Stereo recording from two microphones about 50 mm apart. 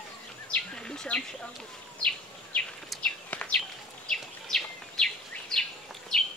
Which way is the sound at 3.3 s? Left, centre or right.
Left.